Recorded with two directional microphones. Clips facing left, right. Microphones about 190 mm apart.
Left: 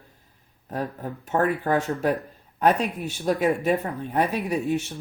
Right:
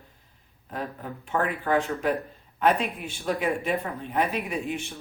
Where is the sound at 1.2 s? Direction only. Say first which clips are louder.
Left 4 dB; 40° left (ahead or behind).